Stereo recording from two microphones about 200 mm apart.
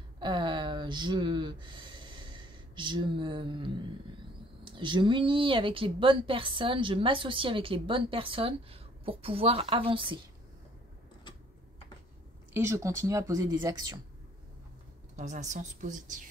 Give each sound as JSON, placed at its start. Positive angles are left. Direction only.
{"t": 0.2, "sound": "a sound", "side_deg": -25}
{"t": 4.6, "sound": "speech", "side_deg": -25}
{"t": 12.5, "sound": "speech", "side_deg": -15}
{"t": 15.1, "sound": "speech", "side_deg": -35}